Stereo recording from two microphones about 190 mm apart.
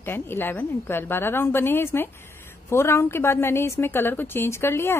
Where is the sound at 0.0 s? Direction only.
10° left (ahead or behind).